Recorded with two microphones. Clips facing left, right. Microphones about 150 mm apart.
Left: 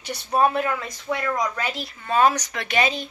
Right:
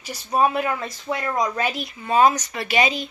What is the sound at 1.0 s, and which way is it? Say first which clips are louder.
Speech: right 1 dB; 25° right (ahead or behind).